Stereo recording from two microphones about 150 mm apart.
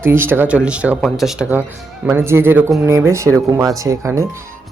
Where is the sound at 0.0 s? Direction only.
15° right (ahead or behind).